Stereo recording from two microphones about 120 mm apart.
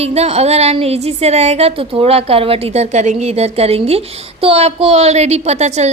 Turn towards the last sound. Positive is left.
turn(degrees=-65)  # may be behind; listen again after turning